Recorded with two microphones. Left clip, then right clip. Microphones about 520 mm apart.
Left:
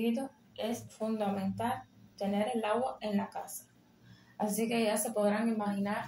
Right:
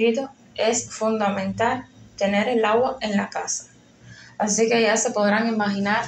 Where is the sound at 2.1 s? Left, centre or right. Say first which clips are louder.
Right 13 dB; left.